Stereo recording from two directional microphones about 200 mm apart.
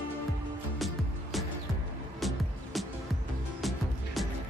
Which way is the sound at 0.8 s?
Centre (ahead or behind).